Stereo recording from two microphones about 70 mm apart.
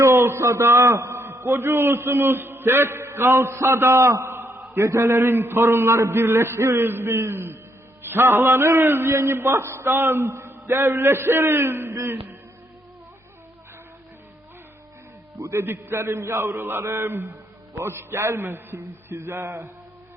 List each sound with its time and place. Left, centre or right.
0.0 s a sound: right
1.2 s a man's voice: right
15.4 s a man's voice: right